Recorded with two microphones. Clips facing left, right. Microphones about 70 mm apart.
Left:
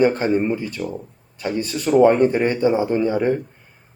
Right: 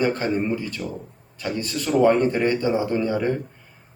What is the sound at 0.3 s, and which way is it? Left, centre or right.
A man's voice, centre.